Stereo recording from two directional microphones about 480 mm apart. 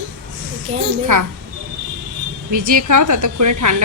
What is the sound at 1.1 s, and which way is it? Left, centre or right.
Speech, right.